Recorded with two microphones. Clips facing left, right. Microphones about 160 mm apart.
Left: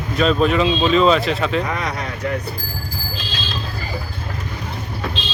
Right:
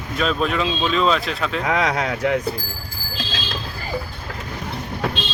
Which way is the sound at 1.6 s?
90° right.